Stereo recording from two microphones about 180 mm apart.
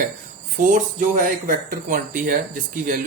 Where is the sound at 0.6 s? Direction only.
45° right (ahead or behind).